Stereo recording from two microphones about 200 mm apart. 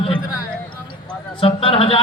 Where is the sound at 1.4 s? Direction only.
25° left (ahead or behind).